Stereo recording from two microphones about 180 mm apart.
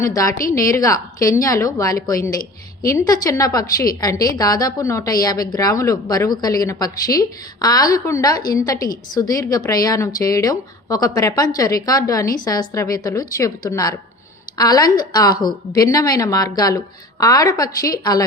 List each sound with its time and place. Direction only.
0.0 s a woman's voice: 20° left (ahead or behind)